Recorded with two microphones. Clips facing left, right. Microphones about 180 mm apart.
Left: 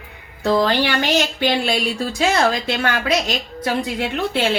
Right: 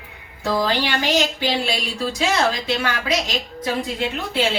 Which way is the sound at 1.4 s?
55° left (ahead or behind).